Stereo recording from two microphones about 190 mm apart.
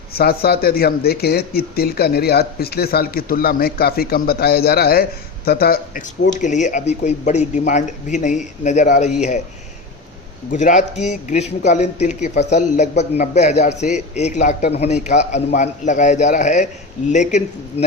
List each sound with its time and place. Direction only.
0.1 s speech: 55° left (ahead or behind)
10.5 s speech: 40° left (ahead or behind)